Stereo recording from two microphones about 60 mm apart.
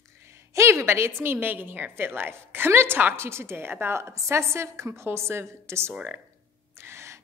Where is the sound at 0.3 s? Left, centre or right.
Right.